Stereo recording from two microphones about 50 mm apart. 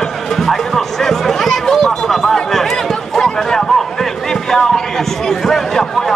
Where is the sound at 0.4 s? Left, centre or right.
Centre.